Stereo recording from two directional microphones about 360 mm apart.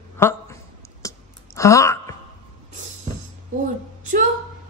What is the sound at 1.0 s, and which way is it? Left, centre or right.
Clicking, centre.